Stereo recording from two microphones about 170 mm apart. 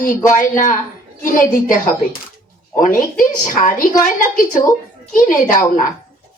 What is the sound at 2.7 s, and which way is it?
Speech, 50° left (ahead or behind).